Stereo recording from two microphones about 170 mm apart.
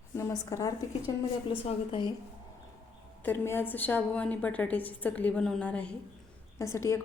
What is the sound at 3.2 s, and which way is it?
A woman's voice, 10° left (ahead or behind).